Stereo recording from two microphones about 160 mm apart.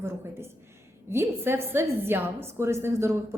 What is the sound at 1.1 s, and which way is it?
A woman's voice, 15° right (ahead or behind).